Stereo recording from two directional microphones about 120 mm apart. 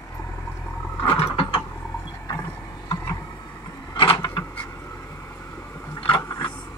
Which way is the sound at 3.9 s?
50° left (ahead or behind).